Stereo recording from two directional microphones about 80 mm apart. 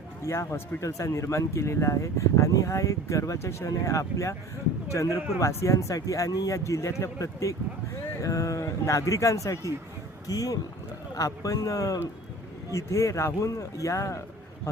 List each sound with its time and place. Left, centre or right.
0.3 s speech: left